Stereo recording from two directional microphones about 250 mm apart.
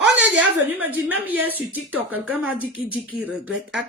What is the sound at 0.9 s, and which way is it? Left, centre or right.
A man's voice, centre.